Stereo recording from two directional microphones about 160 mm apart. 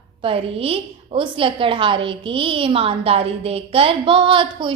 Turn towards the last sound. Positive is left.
turn(degrees=-30)  # may be behind; listen again after turning